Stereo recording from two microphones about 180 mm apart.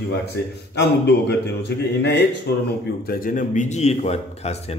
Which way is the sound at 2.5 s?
65° left (ahead or behind).